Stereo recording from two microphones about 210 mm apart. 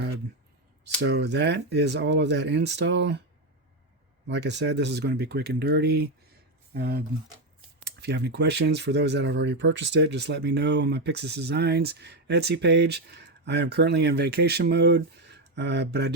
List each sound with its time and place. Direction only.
1.0 s speech: 55° right (ahead or behind)
4.3 s speech: 55° right (ahead or behind)